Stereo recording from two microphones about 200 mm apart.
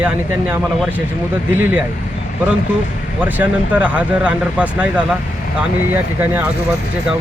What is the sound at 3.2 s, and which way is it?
Speech, 10° right (ahead or behind).